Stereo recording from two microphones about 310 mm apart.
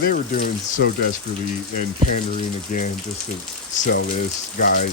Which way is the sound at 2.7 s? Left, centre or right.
Left.